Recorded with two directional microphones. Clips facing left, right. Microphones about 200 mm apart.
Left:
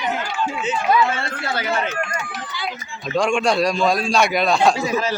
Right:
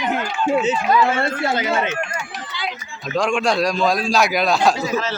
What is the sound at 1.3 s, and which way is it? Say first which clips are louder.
Speech: right 4 dB; 20° right (ahead or behind).